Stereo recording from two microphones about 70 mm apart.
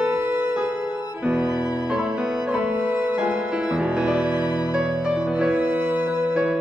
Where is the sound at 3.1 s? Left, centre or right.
Centre.